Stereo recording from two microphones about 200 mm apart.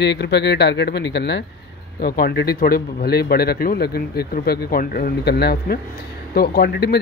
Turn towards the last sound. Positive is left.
turn(degrees=55)  # may be behind; listen again after turning